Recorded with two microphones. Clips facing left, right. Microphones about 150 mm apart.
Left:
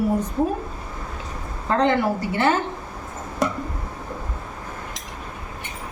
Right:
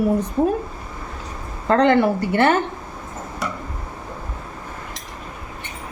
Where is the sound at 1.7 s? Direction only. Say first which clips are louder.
Right 4 dB; 65° right (ahead or behind).